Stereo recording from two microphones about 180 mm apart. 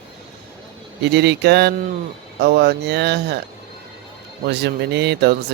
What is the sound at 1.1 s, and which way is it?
Speech, 70° right (ahead or behind).